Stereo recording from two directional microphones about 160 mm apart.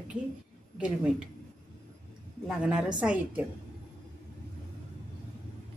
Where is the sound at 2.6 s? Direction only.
5° right (ahead or behind).